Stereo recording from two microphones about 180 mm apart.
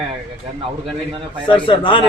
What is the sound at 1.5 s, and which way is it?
Speech, 25° left (ahead or behind).